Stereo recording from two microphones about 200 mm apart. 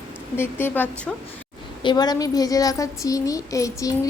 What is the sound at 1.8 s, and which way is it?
Speech, 20° left (ahead or behind).